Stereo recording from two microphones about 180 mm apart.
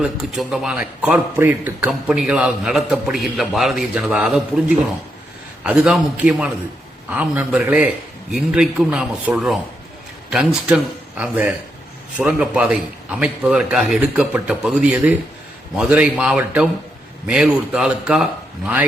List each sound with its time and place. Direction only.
0.0 s a man's voice: centre (ahead or behind)
5.6 s a man's voice: 5° right (ahead or behind)